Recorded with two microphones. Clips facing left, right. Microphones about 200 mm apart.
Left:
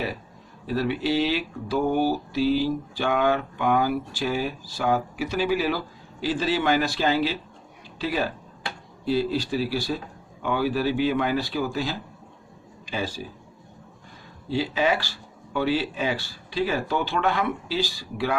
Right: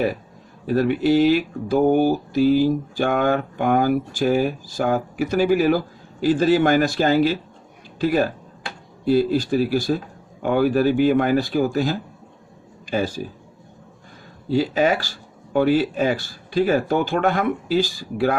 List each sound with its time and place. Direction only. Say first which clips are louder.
0.7 s speech: right 7 dB; 50° right (ahead or behind)
14.5 s speech: right 5 dB; 45° right (ahead or behind)